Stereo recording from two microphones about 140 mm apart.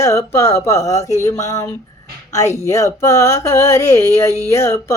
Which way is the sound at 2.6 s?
20° left (ahead or behind).